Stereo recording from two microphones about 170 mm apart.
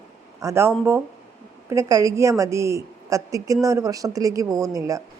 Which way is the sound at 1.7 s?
20° right (ahead or behind).